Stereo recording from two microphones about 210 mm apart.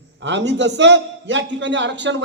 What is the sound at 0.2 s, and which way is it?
A man's voice, 55° right (ahead or behind).